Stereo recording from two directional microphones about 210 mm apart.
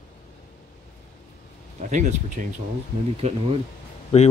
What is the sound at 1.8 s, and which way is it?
Speech, 35° right (ahead or behind).